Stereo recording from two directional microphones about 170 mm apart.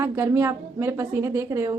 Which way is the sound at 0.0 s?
15° right (ahead or behind).